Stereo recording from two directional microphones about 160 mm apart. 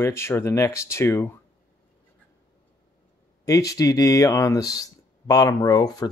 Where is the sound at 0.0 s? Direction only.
15° left (ahead or behind).